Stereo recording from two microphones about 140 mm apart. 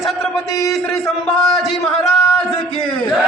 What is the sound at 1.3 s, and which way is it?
Speech, 5° left (ahead or behind).